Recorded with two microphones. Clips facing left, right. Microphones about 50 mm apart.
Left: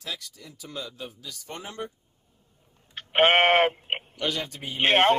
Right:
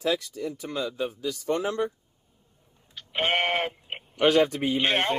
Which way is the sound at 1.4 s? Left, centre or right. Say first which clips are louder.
Right 12 dB; right.